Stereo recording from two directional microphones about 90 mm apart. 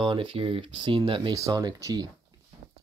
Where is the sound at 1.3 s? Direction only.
45° right (ahead or behind).